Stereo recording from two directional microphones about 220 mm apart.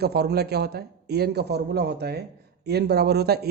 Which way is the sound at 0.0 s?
45° right (ahead or behind).